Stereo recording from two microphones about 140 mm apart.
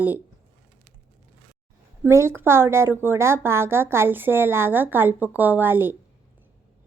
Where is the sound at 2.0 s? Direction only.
20° right (ahead or behind).